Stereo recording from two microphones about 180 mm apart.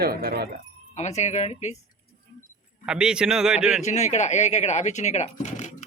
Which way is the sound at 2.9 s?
5° right (ahead or behind).